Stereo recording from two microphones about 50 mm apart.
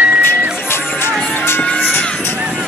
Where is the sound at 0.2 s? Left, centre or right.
Left.